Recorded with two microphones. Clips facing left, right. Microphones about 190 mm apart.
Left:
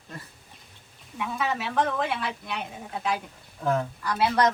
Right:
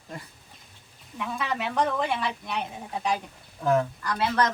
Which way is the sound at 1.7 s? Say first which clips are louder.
Right 2 dB; centre (ahead or behind).